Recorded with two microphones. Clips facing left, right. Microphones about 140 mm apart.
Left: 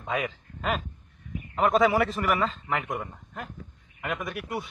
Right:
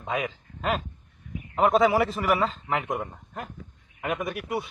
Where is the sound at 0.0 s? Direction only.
5° right (ahead or behind).